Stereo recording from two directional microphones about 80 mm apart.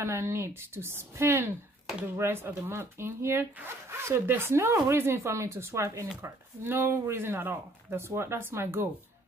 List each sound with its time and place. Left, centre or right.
0.0 s a woman's voice: right